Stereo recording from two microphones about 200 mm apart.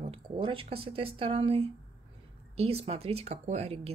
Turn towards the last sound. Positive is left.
turn(degrees=-30)  # may be behind; listen again after turning